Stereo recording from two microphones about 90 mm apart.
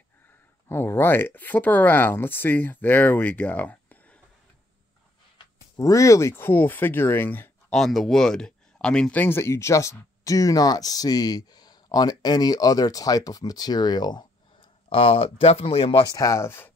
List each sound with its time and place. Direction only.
0.7 s speech: 25° left (ahead or behind)
5.8 s speech: 35° left (ahead or behind)
7.7 s speech: 5° left (ahead or behind)
9.2 s speech: 30° left (ahead or behind); by 14.7 s 55° left (ahead or behind)
14.9 s speech: 90° left
16.1 s speech: 40° left (ahead or behind)